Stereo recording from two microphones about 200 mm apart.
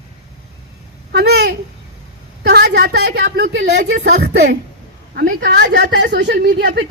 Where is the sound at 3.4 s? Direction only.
70° right (ahead or behind).